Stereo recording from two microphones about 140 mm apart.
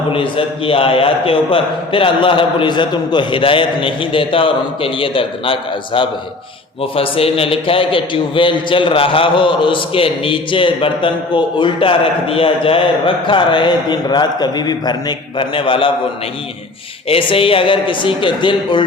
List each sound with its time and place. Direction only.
0.1 s a man's voice: 40° left (ahead or behind)
17.1 s a man's voice: 40° left (ahead or behind)